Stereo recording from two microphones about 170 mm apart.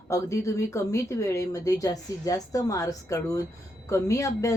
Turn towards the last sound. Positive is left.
turn(degrees=20)  # may be behind; listen again after turning